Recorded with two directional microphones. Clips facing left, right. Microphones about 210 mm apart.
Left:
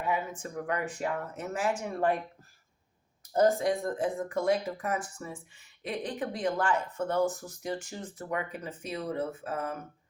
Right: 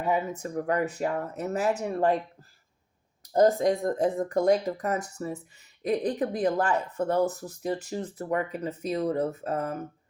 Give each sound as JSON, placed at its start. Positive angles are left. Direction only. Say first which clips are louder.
{"t": 0.0, "sound": "speech", "louder": "right 5 dB", "side_deg": -40}
{"t": 3.3, "sound": "speech", "louder": "right 4 dB", "side_deg": -40}